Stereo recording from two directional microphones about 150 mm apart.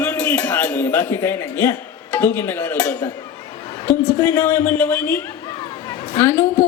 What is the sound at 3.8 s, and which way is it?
A man's voice, 20° left (ahead or behind).